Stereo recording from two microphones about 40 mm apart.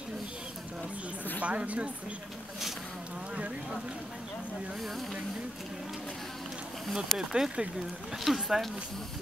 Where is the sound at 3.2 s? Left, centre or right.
Right.